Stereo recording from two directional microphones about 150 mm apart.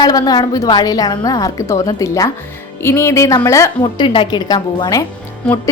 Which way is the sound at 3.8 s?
35° left (ahead or behind).